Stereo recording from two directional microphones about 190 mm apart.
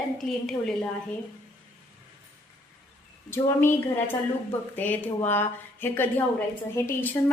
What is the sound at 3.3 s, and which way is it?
A woman's voice, 10° left (ahead or behind).